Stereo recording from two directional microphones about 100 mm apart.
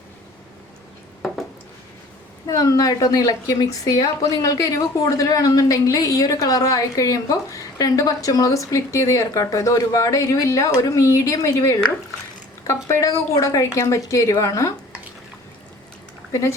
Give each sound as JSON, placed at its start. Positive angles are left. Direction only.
{"t": 2.5, "sound": "a woman's voice", "side_deg": 35}